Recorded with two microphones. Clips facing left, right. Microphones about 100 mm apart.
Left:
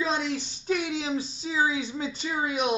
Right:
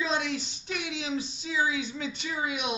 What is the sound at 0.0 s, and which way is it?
A woman's voice, 35° left (ahead or behind).